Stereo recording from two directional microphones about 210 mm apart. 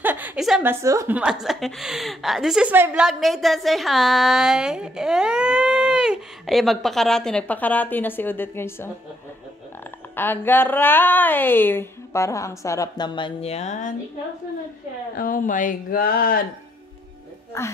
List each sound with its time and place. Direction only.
0.0 s speech: 10° right (ahead or behind); by 8.9 s 10° left (ahead or behind)
10.1 s a woman's voice: 10° left (ahead or behind); by 13.9 s 35° left (ahead or behind)
15.1 s speech: 40° left (ahead or behind)
17.5 s a woman's voice: 15° left (ahead or behind)